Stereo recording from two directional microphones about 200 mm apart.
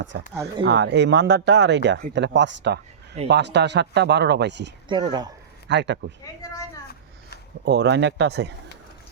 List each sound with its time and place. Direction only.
0.6 s speech: 60° right (ahead or behind)
4.9 s speech: 20° right (ahead or behind)
5.6 s speech: 60° right (ahead or behind)
7.6 s speech: 55° right (ahead or behind)